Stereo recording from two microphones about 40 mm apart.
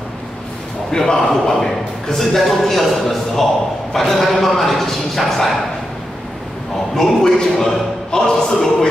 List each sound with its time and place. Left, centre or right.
0.9 s a man's voice: centre
7.0 s speech: centre